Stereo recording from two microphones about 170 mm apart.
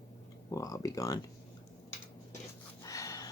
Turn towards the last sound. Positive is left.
turn(degrees=20)  # may be behind; listen again after turning